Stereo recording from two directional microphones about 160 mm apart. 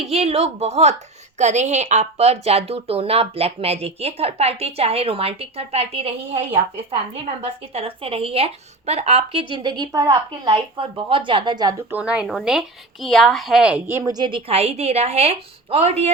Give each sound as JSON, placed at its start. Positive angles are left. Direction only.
{"t": 0.0, "sound": "a woman's voice", "side_deg": -40}
{"t": 11.9, "sound": "speech", "side_deg": -10}